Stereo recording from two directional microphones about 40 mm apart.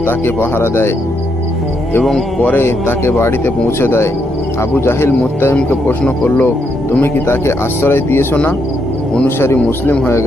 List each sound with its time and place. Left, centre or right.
0.0 s speech: left
2.6 s speech: left
6.2 s speech: left
7.8 s speech: left
9.4 s speech: left